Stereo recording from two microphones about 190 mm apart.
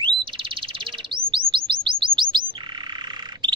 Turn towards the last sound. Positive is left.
turn(degrees=-20)  # may be behind; listen again after turning